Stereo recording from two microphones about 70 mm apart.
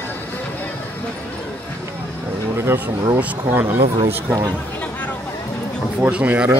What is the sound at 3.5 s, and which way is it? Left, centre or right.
Speech, right.